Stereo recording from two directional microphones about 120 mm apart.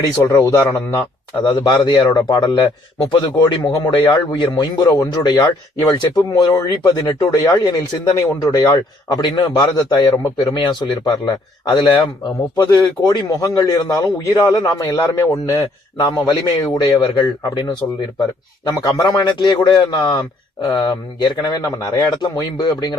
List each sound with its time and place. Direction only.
0.2 s a man's voice: 20° left (ahead or behind)
1.5 s a man's voice: 35° left (ahead or behind)
16.0 s a man's voice: 40° left (ahead or behind)